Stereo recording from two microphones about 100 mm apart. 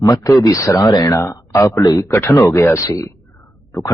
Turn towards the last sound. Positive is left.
turn(degrees=25)  # may be behind; listen again after turning